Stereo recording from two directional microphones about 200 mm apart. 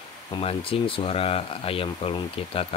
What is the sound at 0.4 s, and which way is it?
Speech, 30° left (ahead or behind).